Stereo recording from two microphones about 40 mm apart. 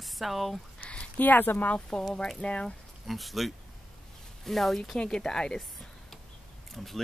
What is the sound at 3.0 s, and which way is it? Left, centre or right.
Speech, centre.